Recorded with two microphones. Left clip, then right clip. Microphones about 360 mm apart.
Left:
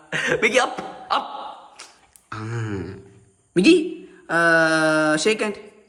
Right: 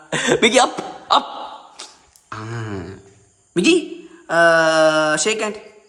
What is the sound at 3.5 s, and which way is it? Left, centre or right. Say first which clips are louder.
A woman's voice: even; centre.